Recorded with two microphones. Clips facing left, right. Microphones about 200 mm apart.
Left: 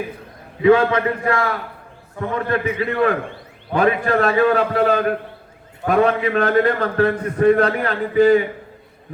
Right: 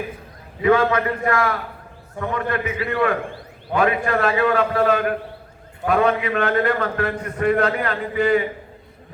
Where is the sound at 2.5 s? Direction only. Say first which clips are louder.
Left 3 dB; 35° left (ahead or behind).